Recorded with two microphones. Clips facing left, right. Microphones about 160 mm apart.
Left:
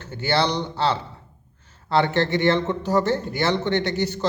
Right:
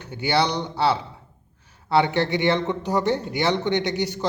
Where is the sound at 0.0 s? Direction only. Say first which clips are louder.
Even; 15° right (ahead or behind).